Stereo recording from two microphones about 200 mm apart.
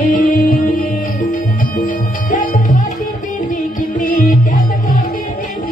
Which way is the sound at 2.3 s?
40° left (ahead or behind).